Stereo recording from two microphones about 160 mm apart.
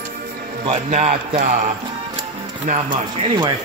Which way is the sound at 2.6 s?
45° right (ahead or behind).